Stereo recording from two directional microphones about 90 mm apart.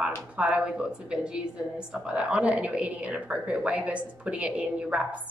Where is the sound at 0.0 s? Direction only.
15° right (ahead or behind).